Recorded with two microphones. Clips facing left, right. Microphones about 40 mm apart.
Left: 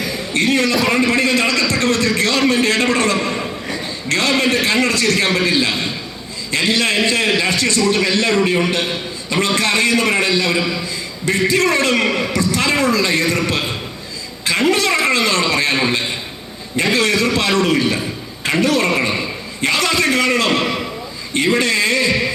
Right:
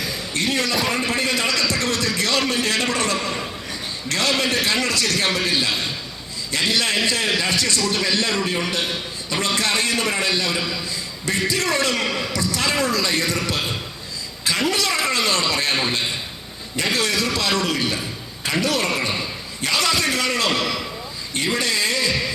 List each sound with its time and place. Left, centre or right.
0.3 s a man's voice: left